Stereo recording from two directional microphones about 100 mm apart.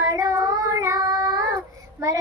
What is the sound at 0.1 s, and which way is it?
Child singing, 35° right (ahead or behind).